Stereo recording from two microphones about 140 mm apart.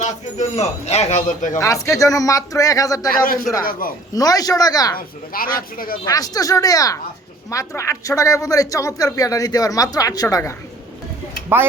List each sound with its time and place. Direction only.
0.0 s speech: 55° left (ahead or behind)
1.5 s speech: 20° left (ahead or behind)
3.6 s speech: 90° left
4.1 s speech: 25° left (ahead or behind)
4.9 s speech: 90° left
6.1 s speech: 25° left (ahead or behind)